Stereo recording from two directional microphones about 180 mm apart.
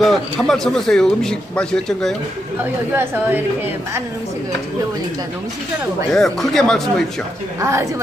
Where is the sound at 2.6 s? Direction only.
10° right (ahead or behind).